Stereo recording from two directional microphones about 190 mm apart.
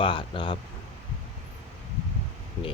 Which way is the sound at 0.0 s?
25° left (ahead or behind).